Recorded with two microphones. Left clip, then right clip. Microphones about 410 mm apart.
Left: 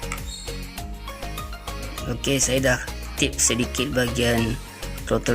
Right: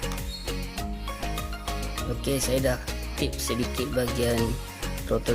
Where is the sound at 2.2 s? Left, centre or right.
Right.